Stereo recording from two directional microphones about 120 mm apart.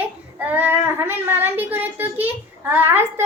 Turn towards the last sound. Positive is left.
turn(degrees=-15)  # may be behind; listen again after turning